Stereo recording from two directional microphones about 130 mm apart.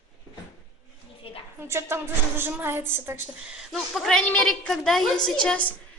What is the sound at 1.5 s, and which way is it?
A woman's voice, 20° right (ahead or behind).